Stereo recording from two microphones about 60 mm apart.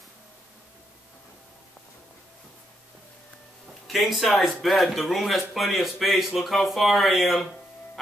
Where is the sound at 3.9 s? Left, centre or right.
Centre.